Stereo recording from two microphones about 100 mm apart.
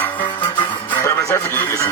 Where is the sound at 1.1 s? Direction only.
30° left (ahead or behind).